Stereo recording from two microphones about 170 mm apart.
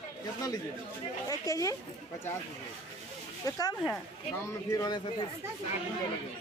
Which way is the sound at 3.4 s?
20° left (ahead or behind).